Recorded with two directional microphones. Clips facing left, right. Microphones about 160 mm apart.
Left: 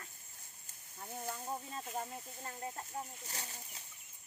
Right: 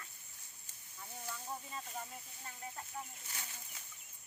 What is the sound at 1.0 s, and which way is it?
Speech, 50° left (ahead or behind).